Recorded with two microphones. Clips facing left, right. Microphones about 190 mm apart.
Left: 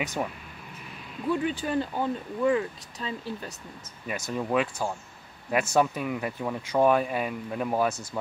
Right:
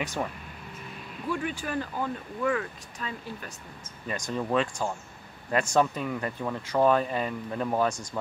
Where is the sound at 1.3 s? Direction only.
30° left (ahead or behind).